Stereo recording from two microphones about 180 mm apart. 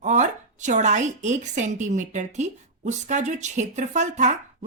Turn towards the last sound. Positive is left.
turn(degrees=-40)  # may be behind; listen again after turning